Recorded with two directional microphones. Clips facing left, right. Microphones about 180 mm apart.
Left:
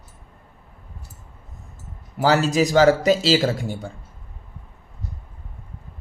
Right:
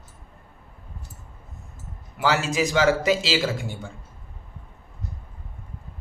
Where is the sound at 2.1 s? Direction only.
40° left (ahead or behind).